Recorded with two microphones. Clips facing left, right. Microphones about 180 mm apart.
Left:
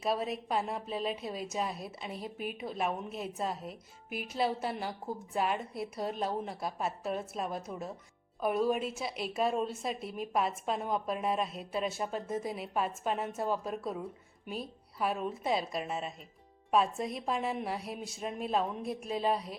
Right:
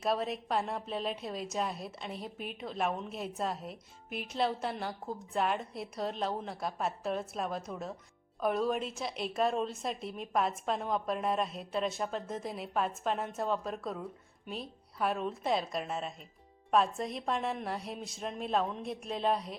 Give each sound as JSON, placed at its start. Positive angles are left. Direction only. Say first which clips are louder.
{"t": 0.0, "sound": "a woman's voice", "louder": "even", "side_deg": 0}